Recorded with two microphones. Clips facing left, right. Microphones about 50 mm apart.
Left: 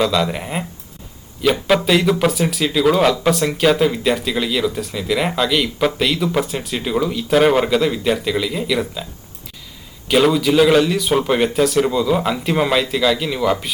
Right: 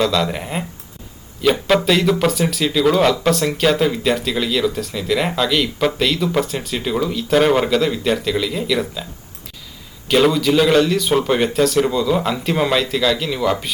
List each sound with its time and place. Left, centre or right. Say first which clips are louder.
0.0 s speech: even; centre
10.1 s speech: even; centre